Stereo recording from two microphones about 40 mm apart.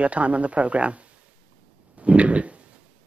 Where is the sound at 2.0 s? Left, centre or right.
Right.